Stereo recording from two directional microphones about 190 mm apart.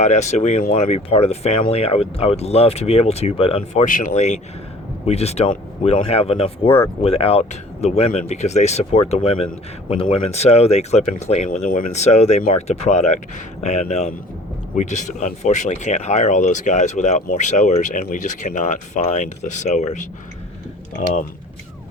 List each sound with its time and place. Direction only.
0.0 s speech: 35° left (ahead or behind)
3.8 s speech: 45° left (ahead or behind)